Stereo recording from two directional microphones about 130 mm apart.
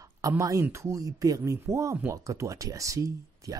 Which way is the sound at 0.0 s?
25° right (ahead or behind).